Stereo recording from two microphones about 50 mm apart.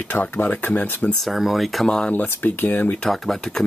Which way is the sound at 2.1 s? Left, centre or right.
Left.